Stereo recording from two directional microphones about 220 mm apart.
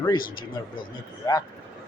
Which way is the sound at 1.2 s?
15° left (ahead or behind).